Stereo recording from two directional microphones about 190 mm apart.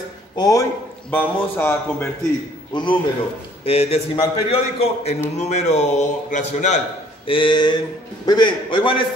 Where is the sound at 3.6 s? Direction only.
30° left (ahead or behind).